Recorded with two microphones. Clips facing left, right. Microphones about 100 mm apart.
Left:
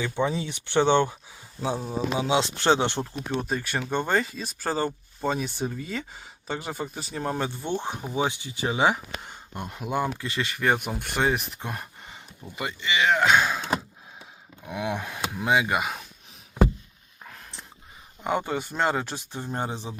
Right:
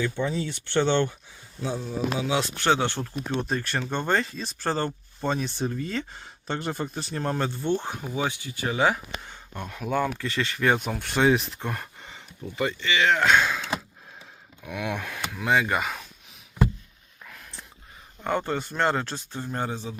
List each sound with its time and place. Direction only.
0.0 s speech: 15° left (ahead or behind)
2.1 s speech: 25° left (ahead or behind)
3.3 s speech: 5° left (ahead or behind)
14.6 s speech: 25° left (ahead or behind)
15.4 s speech: 10° left (ahead or behind)
17.2 s a sound: 30° left (ahead or behind)
18.2 s speech: 10° left (ahead or behind)